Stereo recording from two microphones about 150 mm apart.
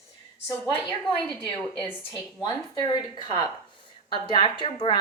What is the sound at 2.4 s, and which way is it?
A woman's voice, 30° left (ahead or behind).